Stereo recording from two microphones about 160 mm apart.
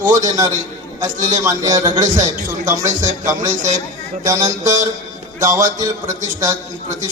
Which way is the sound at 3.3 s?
20° right (ahead or behind).